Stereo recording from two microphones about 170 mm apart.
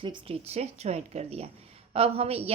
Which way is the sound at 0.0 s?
30° right (ahead or behind).